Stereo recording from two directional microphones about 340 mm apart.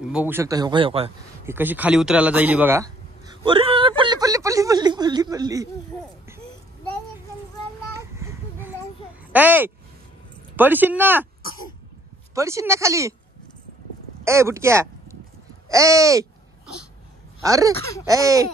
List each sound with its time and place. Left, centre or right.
0.0 s speech: centre
7.9 s a sound: centre
9.3 s speech: centre
12.4 s speech: centre
14.2 s speech: centre
17.4 s speech: centre